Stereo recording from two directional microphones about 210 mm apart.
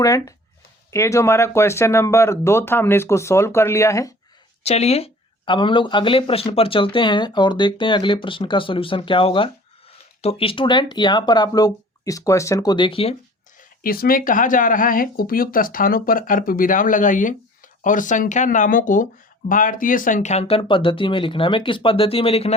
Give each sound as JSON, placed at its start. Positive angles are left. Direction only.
{"t": 0.0, "sound": "speech", "side_deg": 15}
{"t": 4.6, "sound": "speech", "side_deg": 30}
{"t": 13.6, "sound": "speech", "side_deg": 45}